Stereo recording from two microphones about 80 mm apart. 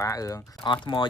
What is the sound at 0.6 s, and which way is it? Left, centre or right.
Speech, left.